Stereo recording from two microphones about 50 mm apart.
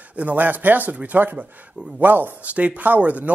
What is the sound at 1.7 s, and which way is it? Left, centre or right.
Speech, right.